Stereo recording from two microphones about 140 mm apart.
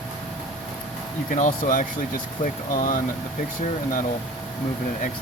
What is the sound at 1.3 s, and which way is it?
Speech, 75° left (ahead or behind).